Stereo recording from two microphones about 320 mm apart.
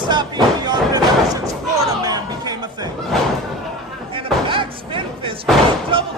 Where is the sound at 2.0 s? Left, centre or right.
Centre.